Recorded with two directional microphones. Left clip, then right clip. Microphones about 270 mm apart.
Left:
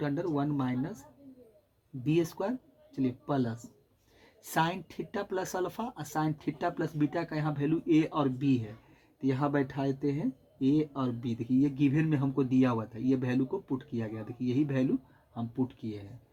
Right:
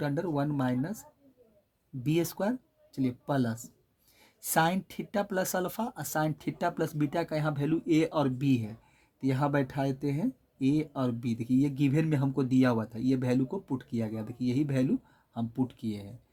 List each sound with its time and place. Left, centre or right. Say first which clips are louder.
0.0 s speech: right 1 dB; right
2.0 s speech: even; right